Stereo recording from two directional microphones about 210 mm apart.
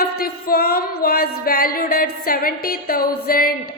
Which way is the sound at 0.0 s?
45° left (ahead or behind).